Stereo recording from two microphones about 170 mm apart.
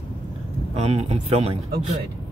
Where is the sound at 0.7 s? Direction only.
40° right (ahead or behind).